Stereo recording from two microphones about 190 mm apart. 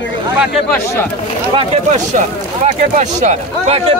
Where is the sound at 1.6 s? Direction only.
40° right (ahead or behind).